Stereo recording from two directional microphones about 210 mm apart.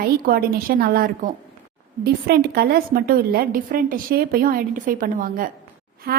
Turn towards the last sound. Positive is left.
turn(degrees=-45)  # may be behind; listen again after turning